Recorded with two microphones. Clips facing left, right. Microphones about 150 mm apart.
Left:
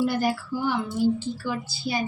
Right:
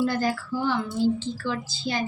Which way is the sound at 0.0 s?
15° left (ahead or behind).